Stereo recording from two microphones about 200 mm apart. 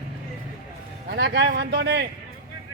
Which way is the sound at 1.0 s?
55° right (ahead or behind).